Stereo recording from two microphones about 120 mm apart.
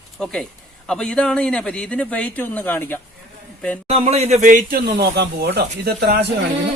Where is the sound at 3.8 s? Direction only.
60° right (ahead or behind); by 4.9 s 85° right.